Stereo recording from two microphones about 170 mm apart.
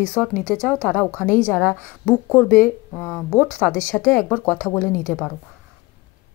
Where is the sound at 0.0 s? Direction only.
10° left (ahead or behind).